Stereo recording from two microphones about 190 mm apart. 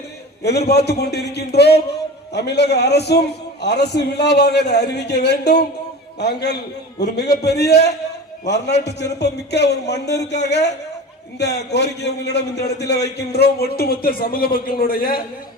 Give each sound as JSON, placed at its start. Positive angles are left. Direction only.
{"t": 0.4, "sound": "a man's voice", "side_deg": 60}